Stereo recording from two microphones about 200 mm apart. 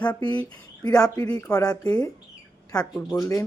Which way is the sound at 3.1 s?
15° left (ahead or behind).